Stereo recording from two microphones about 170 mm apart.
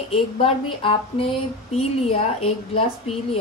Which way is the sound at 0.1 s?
35° left (ahead or behind).